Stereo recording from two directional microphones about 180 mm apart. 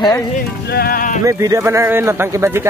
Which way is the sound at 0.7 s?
60° left (ahead or behind).